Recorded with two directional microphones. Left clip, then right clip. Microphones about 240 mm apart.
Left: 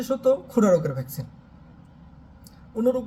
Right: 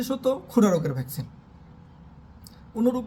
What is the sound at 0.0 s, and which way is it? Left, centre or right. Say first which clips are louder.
A man's voice: left 4 dB; centre.